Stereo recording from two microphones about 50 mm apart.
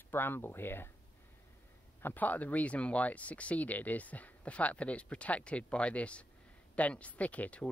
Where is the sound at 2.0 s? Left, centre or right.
Left.